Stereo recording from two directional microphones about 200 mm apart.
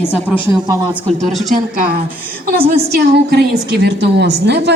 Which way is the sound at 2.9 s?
55° right (ahead or behind).